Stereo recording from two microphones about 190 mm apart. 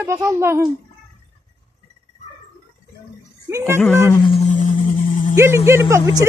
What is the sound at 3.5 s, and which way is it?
Speech, 15° right (ahead or behind).